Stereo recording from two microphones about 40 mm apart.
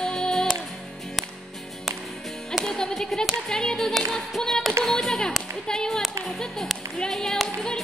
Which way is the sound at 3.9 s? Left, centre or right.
Centre.